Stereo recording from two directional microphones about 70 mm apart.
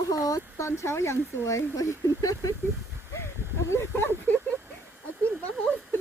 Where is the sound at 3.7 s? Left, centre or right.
Left.